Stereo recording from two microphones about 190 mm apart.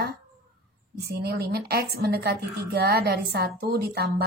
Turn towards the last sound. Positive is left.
turn(degrees=-60)  # may be behind; listen again after turning